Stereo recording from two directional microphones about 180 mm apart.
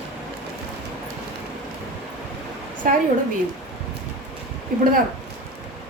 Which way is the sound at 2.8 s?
50° right (ahead or behind).